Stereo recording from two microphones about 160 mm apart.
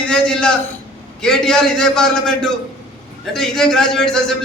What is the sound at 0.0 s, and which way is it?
A man's voice, 5° left (ahead or behind).